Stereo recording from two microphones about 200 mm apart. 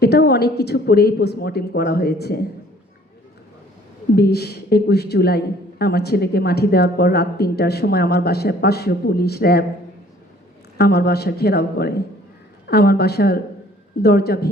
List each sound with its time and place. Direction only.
0.0 s speech: 55° left (ahead or behind)
4.1 s speech: 55° left (ahead or behind)
10.8 s speech: 50° left (ahead or behind)